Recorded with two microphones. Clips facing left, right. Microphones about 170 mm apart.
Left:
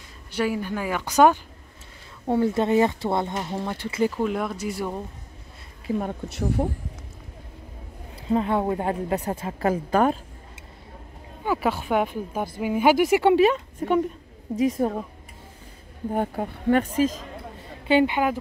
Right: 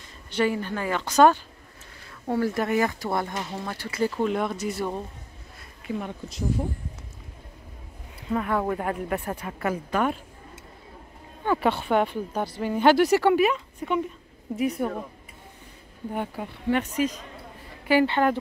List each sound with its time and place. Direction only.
0.4 s speech: 5° left (ahead or behind)
4.2 s speech: 5° left (ahead or behind)
5.9 s speech: 35° left (ahead or behind)
6.2 s speech: 65° left (ahead or behind)
8.3 s speech: 25° left (ahead or behind)
11.4 s speech: 5° left (ahead or behind)
13.7 s speech: 45° left (ahead or behind)
16.1 s speech: 40° left (ahead or behind)
17.8 s speech: 20° left (ahead or behind)